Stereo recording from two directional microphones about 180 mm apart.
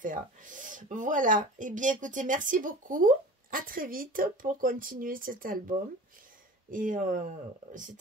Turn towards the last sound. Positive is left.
turn(degrees=-45)  # may be behind; listen again after turning